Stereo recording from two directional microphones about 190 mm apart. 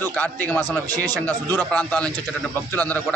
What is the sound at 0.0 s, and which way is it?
A man's voice, 10° left (ahead or behind).